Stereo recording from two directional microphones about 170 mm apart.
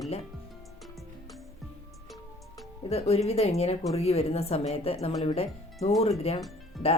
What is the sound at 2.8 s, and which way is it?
A woman's voice, 35° left (ahead or behind).